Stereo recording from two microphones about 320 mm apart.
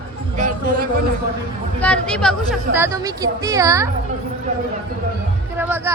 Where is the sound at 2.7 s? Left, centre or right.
Centre.